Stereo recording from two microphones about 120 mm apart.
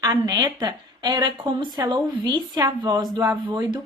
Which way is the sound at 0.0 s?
35° right (ahead or behind).